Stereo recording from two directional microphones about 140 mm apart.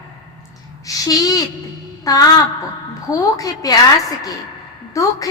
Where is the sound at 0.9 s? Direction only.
25° left (ahead or behind).